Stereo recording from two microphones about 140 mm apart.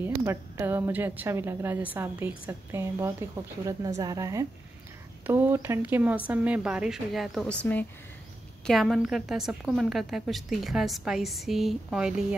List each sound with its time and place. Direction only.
0.0 s a woman's voice: 20° right (ahead or behind)